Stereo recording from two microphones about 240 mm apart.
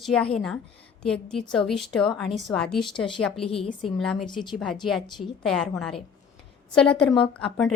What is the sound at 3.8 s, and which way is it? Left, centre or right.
A woman's voice, centre.